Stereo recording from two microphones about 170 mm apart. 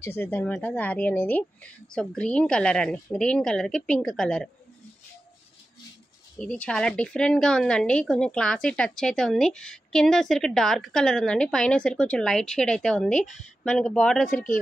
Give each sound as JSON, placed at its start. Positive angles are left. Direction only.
{"t": 0.0, "sound": "a woman's voice", "side_deg": 15}
{"t": 6.3, "sound": "a woman's voice", "side_deg": 5}
{"t": 14.3, "sound": "speech", "side_deg": 50}